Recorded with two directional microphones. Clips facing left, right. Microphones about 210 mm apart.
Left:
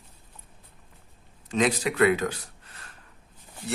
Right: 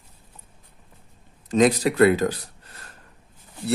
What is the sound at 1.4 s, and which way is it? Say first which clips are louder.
Speech: right 6 dB; 40° right (ahead or behind).